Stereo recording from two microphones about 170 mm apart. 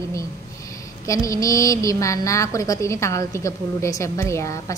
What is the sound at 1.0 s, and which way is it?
A woman's voice, 20° left (ahead or behind).